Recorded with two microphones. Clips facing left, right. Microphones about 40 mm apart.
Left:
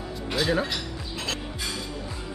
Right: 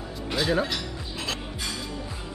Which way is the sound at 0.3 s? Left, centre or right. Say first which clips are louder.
Even; centre.